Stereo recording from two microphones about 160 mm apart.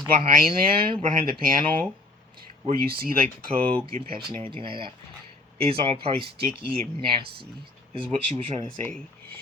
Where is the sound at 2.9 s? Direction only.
65° right (ahead or behind).